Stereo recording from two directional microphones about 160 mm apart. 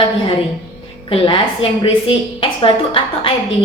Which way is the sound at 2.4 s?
35° left (ahead or behind).